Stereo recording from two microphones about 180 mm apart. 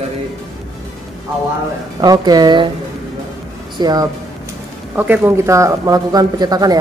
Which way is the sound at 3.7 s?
20° right (ahead or behind).